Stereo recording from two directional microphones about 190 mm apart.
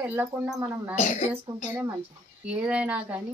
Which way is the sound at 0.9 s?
40° left (ahead or behind).